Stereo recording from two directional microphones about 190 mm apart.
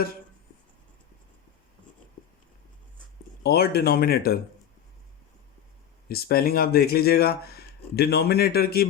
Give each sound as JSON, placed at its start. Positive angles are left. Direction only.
{"t": 2.2, "sound": "writing", "side_deg": 25}
{"t": 3.4, "sound": "speech", "side_deg": 55}
{"t": 6.1, "sound": "speech", "side_deg": 55}